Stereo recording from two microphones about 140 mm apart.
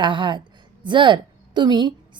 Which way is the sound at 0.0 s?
35° right (ahead or behind).